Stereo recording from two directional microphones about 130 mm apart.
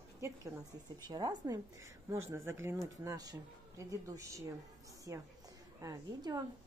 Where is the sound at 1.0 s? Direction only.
30° right (ahead or behind).